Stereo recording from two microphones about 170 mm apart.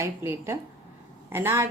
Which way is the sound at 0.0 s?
15° right (ahead or behind).